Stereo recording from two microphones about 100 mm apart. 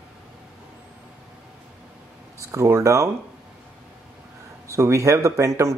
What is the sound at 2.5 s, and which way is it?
Speech, 30° right (ahead or behind).